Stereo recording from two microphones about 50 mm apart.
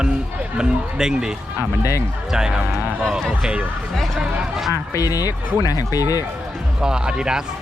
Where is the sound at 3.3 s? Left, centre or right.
Centre.